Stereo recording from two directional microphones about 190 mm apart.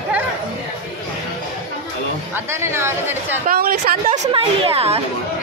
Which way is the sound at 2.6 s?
15° right (ahead or behind).